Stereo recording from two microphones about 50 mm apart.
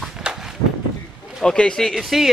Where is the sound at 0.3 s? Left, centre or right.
Centre.